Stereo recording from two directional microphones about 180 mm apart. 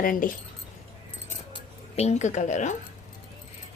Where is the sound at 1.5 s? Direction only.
35° left (ahead or behind).